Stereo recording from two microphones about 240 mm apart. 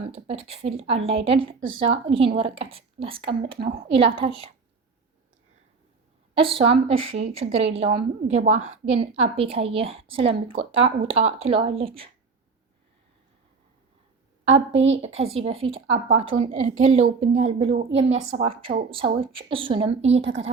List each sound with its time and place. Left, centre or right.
0.1 s a woman's voice: right
6.3 s a woman's voice: right
14.4 s a woman's voice: right
15.7 s a woman's voice: right
17.6 s a woman's voice: right
17.9 s a woman's voice: right
20.1 s a woman's voice: right